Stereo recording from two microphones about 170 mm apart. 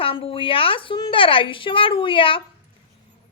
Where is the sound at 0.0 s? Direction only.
30° left (ahead or behind).